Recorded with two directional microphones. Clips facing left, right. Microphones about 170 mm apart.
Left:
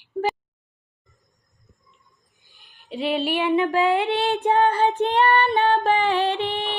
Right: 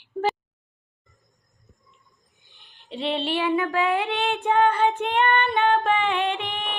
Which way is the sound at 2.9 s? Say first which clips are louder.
Left 3 dB; 5° left (ahead or behind).